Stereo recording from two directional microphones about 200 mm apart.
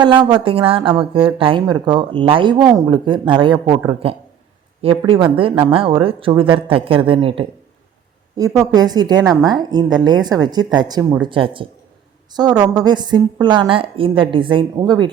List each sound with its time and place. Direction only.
0.0 s speech: 25° right (ahead or behind)